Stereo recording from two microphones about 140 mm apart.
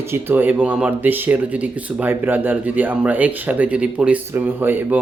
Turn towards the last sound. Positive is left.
turn(degrees=-15)  # may be behind; listen again after turning